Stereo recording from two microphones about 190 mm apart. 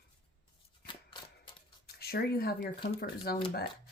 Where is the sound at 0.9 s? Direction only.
25° left (ahead or behind).